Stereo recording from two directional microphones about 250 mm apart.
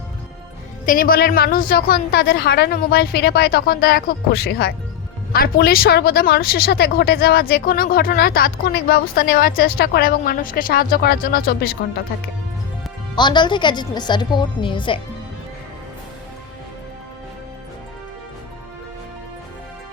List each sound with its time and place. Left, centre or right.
0.9 s a woman's voice: left
13.1 s a woman's voice: centre